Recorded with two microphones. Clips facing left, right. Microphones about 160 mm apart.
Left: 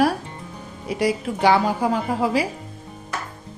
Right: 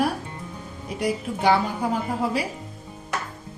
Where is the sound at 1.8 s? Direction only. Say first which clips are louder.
Left 4 dB; 90° left.